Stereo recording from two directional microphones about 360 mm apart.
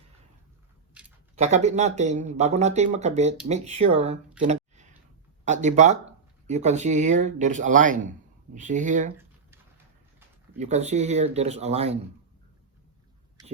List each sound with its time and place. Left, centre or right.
1.4 s speech: centre
9.1 s a sound: centre
10.6 s speech: centre